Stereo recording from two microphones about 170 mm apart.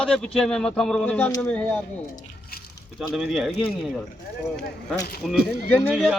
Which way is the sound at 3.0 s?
Centre (ahead or behind).